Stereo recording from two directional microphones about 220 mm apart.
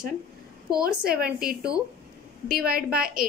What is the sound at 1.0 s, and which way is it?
A woman's voice, 40° right (ahead or behind).